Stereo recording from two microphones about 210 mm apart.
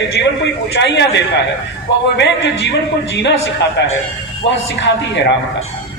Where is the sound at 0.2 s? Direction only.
55° left (ahead or behind).